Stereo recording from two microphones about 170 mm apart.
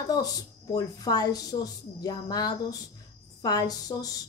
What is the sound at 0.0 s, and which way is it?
Speech, 20° left (ahead or behind).